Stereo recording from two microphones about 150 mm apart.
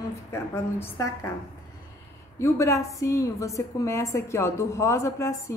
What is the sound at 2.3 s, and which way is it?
A woman's voice, 20° left (ahead or behind).